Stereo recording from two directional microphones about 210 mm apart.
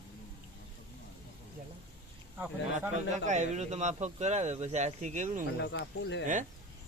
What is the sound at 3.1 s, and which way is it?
Speech, 35° right (ahead or behind).